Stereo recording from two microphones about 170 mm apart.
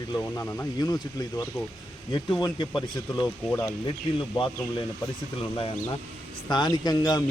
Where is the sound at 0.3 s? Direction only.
20° left (ahead or behind).